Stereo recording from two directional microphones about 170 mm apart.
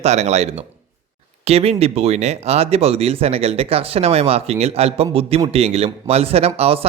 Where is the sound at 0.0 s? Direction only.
40° right (ahead or behind).